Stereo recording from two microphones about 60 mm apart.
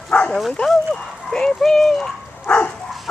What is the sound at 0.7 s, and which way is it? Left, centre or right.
Speech, centre.